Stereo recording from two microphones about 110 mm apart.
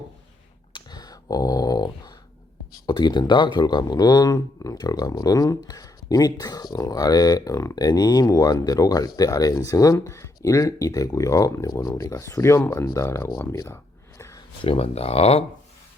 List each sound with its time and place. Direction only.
0.7 s a sound: 40° left (ahead or behind)
2.8 s speech: 40° left (ahead or behind)
14.6 s speech: 60° left (ahead or behind)